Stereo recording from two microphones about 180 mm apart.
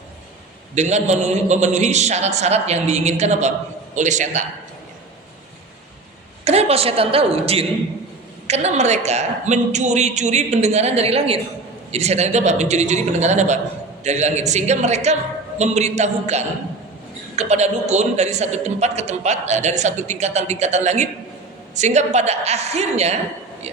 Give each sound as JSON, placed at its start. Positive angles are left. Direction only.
{"t": 0.8, "sound": "a man's voice", "side_deg": -40}
{"t": 6.4, "sound": "a man's voice", "side_deg": -35}